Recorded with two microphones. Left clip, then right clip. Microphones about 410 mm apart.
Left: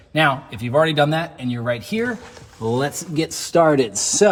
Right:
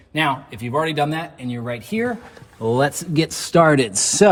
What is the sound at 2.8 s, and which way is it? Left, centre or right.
Speech, centre.